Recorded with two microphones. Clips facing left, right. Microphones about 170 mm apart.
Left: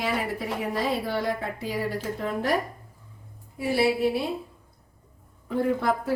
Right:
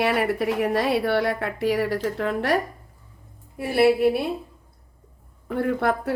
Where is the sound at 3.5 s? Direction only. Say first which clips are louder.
Right 5 dB; 60° right (ahead or behind).